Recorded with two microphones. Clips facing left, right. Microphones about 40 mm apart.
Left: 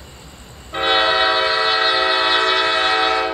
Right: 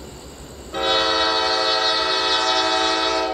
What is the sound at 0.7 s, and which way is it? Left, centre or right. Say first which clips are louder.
Train: left 3 dB; left.